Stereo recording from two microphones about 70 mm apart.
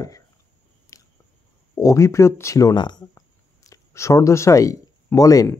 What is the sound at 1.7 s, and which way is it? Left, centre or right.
Speech, left.